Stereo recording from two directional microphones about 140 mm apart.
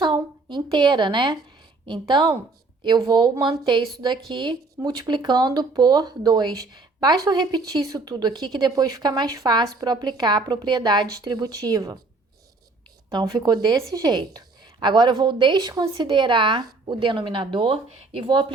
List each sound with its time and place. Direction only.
0.0 s a woman's voice: 35° right (ahead or behind)
13.1 s a woman's voice: 30° right (ahead or behind)